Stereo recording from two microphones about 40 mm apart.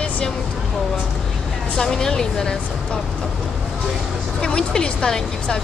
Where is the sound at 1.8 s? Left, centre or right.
Centre.